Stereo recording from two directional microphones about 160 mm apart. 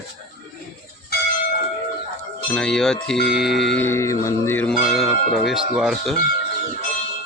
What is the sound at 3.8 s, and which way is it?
Music, 15° left (ahead or behind).